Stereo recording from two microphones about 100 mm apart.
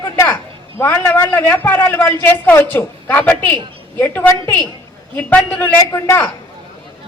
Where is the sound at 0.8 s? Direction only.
25° left (ahead or behind).